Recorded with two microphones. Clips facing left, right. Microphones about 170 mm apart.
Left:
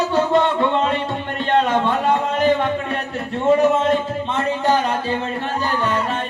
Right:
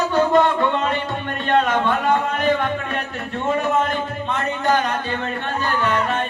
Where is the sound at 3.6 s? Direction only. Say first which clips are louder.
Left 4 dB; 30° left (ahead or behind).